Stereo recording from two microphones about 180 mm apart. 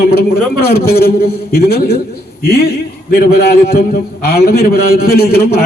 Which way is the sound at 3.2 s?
60° left (ahead or behind).